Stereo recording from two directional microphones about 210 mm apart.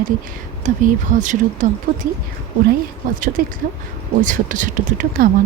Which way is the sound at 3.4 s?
40° right (ahead or behind).